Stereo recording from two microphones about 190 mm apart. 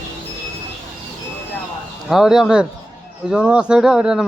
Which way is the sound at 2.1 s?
Centre (ahead or behind).